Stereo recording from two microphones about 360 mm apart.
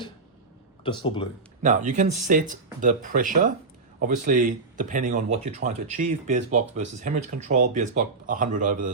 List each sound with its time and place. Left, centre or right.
0.9 s speech: centre
1.6 s speech: centre